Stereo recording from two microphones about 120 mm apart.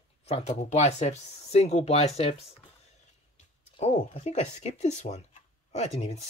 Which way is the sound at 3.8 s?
65° left (ahead or behind).